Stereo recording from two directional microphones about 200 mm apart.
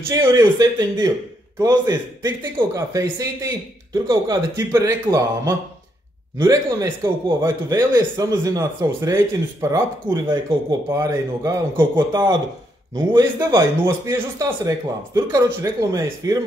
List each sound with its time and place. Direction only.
0.1 s a man's voice: 15° right (ahead or behind)